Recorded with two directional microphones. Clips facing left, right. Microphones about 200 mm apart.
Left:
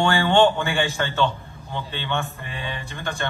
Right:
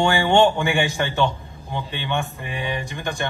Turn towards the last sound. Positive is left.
turn(degrees=-15)  # may be behind; listen again after turning